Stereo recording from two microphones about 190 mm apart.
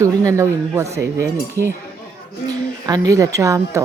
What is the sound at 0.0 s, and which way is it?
A woman's voice, 15° right (ahead or behind).